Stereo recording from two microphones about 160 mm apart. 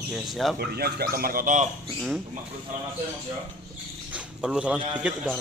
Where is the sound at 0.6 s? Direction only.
80° right; by 1.7 s 55° right (ahead or behind).